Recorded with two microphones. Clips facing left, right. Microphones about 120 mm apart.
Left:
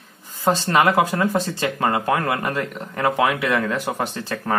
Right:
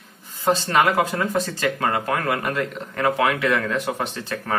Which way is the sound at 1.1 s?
30° left (ahead or behind).